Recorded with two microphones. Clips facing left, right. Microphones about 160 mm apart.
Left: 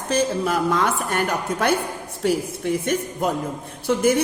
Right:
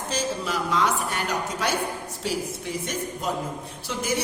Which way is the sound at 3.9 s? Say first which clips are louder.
Left 10 dB; 55° left (ahead or behind).